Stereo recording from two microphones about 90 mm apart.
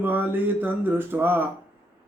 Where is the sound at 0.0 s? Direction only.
20° right (ahead or behind).